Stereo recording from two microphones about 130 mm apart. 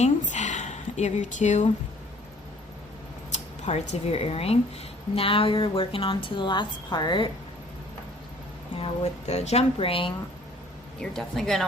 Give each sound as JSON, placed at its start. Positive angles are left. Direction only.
{"t": 0.0, "sound": "a woman's voice", "side_deg": 70}
{"t": 3.3, "sound": "speech", "side_deg": 55}
{"t": 8.7, "sound": "speech", "side_deg": 50}
{"t": 11.0, "sound": "speech", "side_deg": 5}